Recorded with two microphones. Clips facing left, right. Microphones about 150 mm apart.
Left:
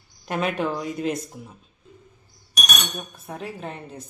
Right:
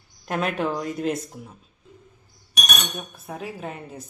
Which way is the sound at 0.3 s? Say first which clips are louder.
Even; centre (ahead or behind).